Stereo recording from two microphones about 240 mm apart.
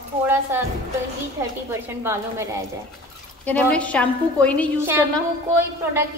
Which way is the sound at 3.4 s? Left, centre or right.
Centre.